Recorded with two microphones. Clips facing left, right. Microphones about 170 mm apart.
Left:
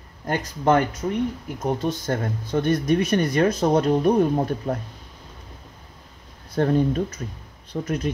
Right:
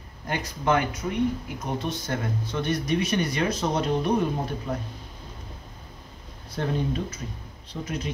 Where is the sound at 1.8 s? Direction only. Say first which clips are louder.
Left 5 dB; 45° left (ahead or behind).